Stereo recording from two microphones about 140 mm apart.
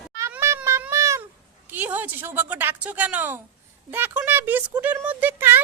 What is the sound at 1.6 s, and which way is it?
A woman's voice, 15° right (ahead or behind).